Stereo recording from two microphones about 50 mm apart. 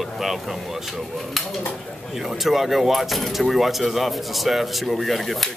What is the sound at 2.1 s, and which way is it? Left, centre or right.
Speech, centre.